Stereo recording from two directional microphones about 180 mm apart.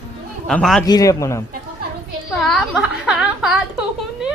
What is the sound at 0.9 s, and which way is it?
Speech, 20° left (ahead or behind).